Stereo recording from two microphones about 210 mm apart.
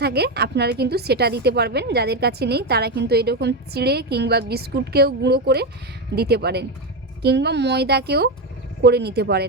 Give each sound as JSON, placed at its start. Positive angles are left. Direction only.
{"t": 0.0, "sound": "a woman's voice", "side_deg": -50}